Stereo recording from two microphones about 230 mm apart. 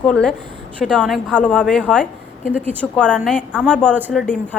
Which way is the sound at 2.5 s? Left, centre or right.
Centre.